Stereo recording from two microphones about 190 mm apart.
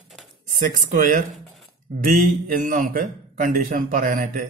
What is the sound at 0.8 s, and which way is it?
A man's voice, 40° right (ahead or behind).